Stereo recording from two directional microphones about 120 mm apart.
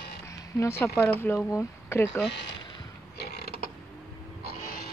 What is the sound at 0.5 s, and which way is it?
Speech, 20° left (ahead or behind).